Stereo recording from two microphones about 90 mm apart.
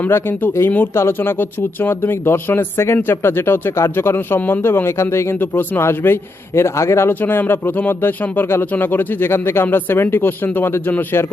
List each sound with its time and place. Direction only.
0.0 s speech: 20° left (ahead or behind)